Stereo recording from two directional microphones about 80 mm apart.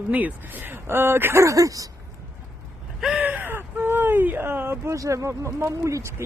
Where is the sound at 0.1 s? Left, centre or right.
Centre; by 1.9 s right.